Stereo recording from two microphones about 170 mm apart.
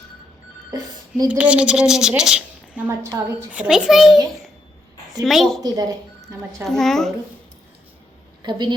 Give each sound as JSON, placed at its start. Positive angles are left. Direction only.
{"t": 1.3, "sound": "a woman's voice", "side_deg": -5}
{"t": 5.2, "sound": "a woman's voice", "side_deg": 0}
{"t": 5.6, "sound": "speech", "side_deg": -20}
{"t": 6.7, "sound": "a woman's voice", "side_deg": 0}
{"t": 8.4, "sound": "a woman's voice", "side_deg": -25}